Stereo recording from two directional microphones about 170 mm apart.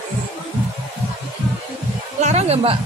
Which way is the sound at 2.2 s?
40° right (ahead or behind).